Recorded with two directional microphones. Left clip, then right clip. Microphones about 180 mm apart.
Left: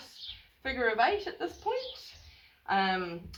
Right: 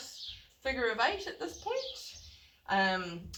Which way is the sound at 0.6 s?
20° left (ahead or behind).